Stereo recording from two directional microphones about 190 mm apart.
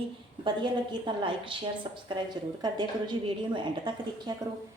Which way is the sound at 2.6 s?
20° right (ahead or behind).